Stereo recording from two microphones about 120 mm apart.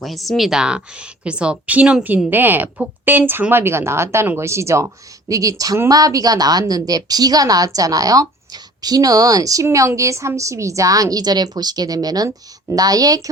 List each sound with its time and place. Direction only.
0.0 s a woman's voice: centre (ahead or behind); by 13.3 s 30° right (ahead or behind)